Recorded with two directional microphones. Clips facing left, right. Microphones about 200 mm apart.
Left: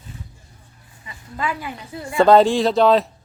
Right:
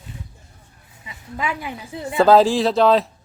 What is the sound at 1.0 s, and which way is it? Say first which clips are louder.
Speech: even; 15° right (ahead or behind).